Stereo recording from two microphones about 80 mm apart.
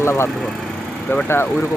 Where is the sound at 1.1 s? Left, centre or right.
Left.